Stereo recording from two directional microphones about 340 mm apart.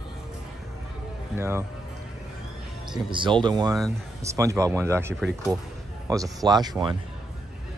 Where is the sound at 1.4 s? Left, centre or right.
Centre.